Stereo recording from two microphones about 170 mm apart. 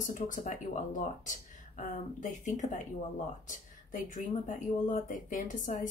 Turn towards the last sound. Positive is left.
turn(degrees=50)  # may be behind; listen again after turning